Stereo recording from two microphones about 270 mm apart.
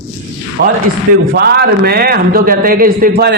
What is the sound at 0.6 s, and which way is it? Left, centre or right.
A man's voice, right.